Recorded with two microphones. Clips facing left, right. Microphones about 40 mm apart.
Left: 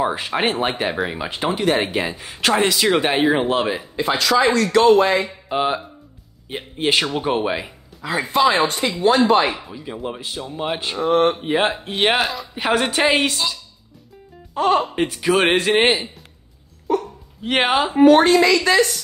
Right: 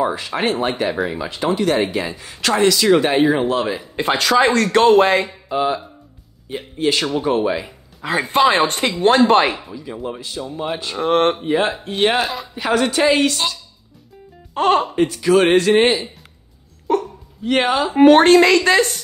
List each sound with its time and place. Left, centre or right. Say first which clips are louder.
0.3 s speech: right 1 dB; left
3.9 s speech: right 2 dB; right
5.5 s speech: right 1 dB; left
8.0 s speech: right 2 dB; right
10.0 s speech: right 1 dB; left
11.0 s speech: right 1 dB; right
11.4 s speech: right 1 dB; left
12.0 s speech: right 1 dB; centre
12.5 s speech: right 2 dB; left
14.5 s speech: right 2 dB; right
15.0 s speech: right 3 dB; left
16.9 s hiccup: right 2 dB; right
17.4 s speech: right 1 dB; left
17.9 s speech: right 3 dB; right